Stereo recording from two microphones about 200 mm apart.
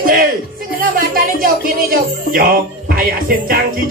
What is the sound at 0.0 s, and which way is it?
Music, 45° right (ahead or behind).